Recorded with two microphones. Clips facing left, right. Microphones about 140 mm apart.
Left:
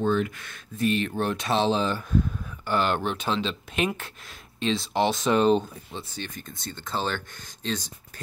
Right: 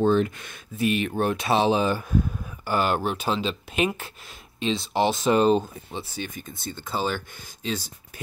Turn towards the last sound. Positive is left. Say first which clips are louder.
# right 1 dB
turn(degrees=-5)  # may be behind; listen again after turning